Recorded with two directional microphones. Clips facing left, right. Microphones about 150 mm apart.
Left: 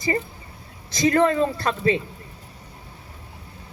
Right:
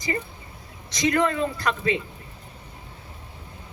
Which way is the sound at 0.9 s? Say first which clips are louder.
Left 4 dB; 35° left (ahead or behind).